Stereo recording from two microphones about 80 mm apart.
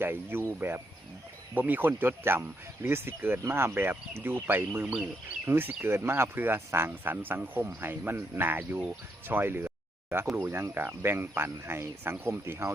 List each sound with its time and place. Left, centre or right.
0.0 s speech: right